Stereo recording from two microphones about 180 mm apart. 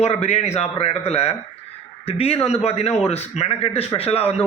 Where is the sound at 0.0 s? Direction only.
35° left (ahead or behind).